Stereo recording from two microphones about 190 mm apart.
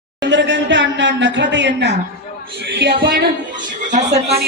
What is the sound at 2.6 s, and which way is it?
Music, 65° right (ahead or behind).